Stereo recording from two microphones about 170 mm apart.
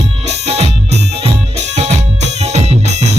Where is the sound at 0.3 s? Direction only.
40° right (ahead or behind).